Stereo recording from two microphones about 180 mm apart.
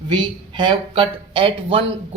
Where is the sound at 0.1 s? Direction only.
25° right (ahead or behind).